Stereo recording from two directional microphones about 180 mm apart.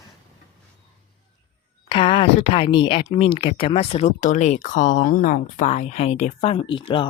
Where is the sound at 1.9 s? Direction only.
30° left (ahead or behind).